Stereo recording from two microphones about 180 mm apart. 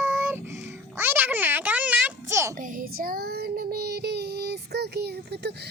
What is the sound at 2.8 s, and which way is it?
Child singing, 55° right (ahead or behind).